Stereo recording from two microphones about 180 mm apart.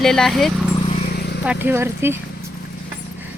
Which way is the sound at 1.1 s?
60° left (ahead or behind).